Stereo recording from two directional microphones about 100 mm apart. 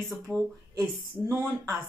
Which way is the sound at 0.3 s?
10° left (ahead or behind).